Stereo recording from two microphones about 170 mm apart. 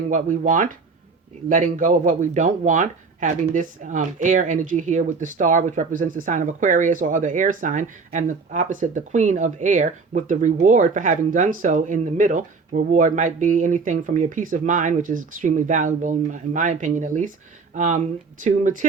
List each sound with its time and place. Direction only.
0.1 s speech: 45° right (ahead or behind)